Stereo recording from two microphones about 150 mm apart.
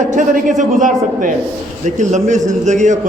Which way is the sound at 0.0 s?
60° right (ahead or behind).